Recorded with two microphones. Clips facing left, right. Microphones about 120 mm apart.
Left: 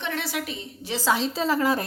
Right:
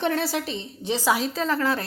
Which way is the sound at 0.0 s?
35° right (ahead or behind).